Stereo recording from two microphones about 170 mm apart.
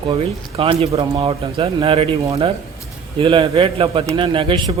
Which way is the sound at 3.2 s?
30° right (ahead or behind).